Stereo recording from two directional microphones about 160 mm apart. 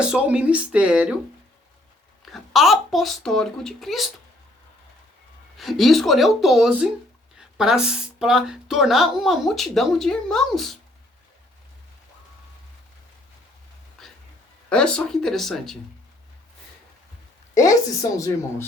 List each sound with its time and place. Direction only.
0.0 s speech: 5° right (ahead or behind)
2.2 s speech: centre (ahead or behind)
5.5 s speech: centre (ahead or behind)
14.0 s music: centre (ahead or behind)
14.7 s speech: 5° left (ahead or behind)
17.5 s a woman's voice: 20° left (ahead or behind)